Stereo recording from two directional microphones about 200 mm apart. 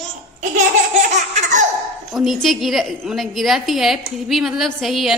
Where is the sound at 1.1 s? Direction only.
40° right (ahead or behind).